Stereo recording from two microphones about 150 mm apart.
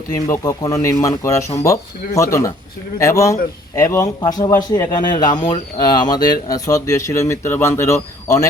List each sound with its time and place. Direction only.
0.1 s speech: 20° left (ahead or behind)